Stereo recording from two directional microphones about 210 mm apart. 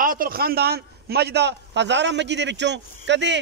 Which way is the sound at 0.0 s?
40° right (ahead or behind).